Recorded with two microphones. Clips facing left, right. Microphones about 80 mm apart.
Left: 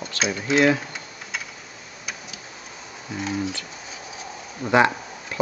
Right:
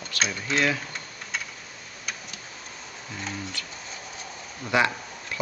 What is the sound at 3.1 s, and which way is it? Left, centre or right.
Speech, centre.